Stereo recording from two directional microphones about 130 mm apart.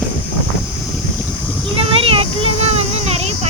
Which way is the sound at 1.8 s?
45° right (ahead or behind).